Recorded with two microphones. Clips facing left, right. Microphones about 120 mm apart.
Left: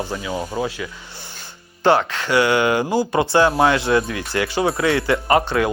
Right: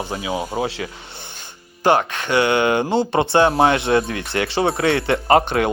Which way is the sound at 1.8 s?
20° right (ahead or behind).